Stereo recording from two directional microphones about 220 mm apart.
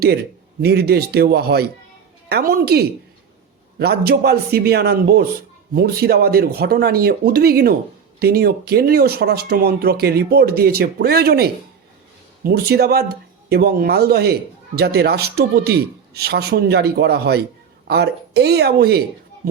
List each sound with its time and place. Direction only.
0.6 s speech: 45° right (ahead or behind)